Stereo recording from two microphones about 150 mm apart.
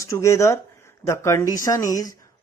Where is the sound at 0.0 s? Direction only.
20° left (ahead or behind).